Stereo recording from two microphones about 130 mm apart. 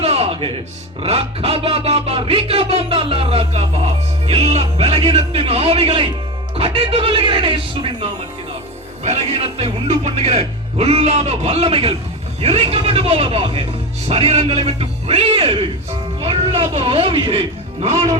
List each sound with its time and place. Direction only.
0.0 s music: 50° right (ahead or behind)
1.0 s speech: 50° right (ahead or behind)
9.0 s speech: 55° right (ahead or behind)